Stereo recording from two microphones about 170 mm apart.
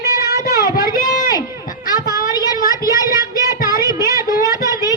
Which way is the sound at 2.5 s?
20° right (ahead or behind).